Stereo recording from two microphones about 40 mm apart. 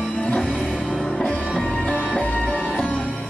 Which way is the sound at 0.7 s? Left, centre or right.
Centre.